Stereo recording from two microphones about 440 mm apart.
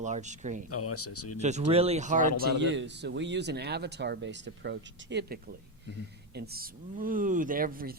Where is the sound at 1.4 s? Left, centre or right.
Centre.